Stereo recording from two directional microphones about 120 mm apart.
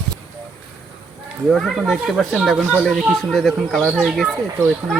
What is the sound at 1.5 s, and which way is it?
Speech, centre (ahead or behind).